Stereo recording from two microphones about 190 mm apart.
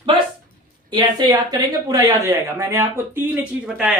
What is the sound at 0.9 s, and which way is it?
Speech, 20° right (ahead or behind).